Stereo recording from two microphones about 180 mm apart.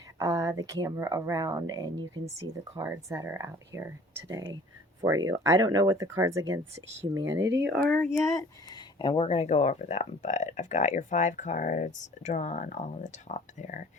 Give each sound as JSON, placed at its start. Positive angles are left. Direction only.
{"t": 0.2, "sound": "speech", "side_deg": -15}
{"t": 7.3, "sound": "speech", "side_deg": -90}
{"t": 7.9, "sound": "speech", "side_deg": 5}